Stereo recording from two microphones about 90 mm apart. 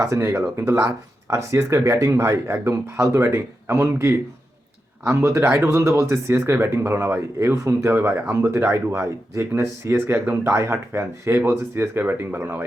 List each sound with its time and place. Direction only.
0.0 s speech: 30° right (ahead or behind)